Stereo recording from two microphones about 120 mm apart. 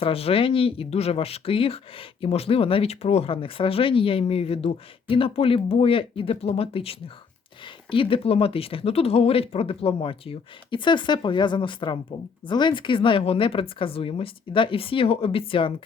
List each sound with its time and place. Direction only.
0.0 s speech: 55° left (ahead or behind)